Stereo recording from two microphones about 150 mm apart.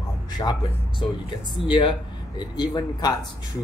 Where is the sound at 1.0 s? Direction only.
35° left (ahead or behind).